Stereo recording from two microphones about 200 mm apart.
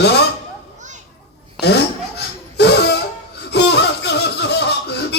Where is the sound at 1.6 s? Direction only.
55° left (ahead or behind).